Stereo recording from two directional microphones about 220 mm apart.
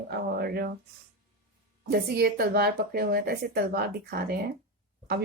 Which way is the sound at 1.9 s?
45° right (ahead or behind).